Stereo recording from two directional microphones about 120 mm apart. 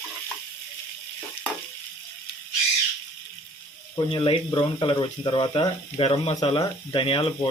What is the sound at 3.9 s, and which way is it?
Speech, 45° left (ahead or behind).